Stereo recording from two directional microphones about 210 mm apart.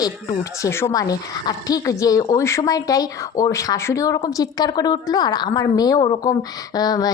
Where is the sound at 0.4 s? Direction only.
15° left (ahead or behind).